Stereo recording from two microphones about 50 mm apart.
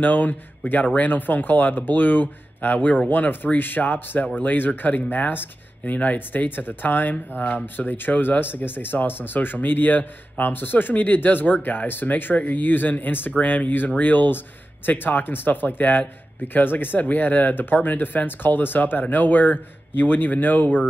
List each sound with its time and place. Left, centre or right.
0.0 s speech: left